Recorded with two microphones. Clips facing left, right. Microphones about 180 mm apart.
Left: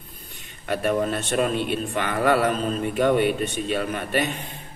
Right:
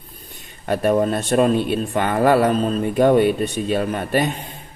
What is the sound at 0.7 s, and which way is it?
A man's voice, 40° right (ahead or behind).